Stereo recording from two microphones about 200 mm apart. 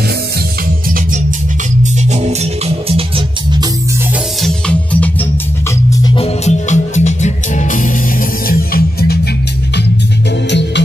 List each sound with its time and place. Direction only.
1.8 s music: 35° right (ahead or behind)
4.4 s music: 5° left (ahead or behind)
5.9 s music: 25° left (ahead or behind); by 9.2 s 50° left (ahead or behind)
10.5 s music: 60° left (ahead or behind)